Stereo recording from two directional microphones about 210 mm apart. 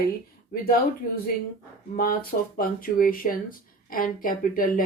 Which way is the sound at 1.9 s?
40° left (ahead or behind).